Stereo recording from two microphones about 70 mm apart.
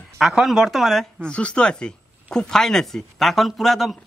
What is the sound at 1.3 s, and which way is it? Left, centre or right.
Speech, centre.